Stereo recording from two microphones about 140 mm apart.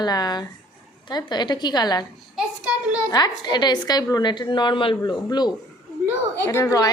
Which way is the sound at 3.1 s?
30° left (ahead or behind).